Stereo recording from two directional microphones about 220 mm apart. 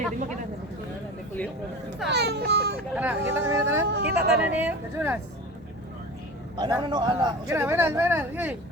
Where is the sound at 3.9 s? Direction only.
50° right (ahead or behind).